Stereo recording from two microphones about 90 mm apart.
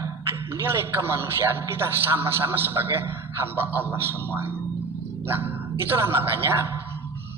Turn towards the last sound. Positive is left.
turn(degrees=-30)  # may be behind; listen again after turning